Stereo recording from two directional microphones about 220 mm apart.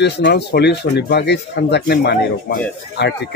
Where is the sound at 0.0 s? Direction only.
50° left (ahead or behind).